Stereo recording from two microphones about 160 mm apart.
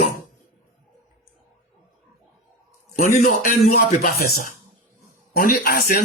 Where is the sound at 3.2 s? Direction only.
60° left (ahead or behind).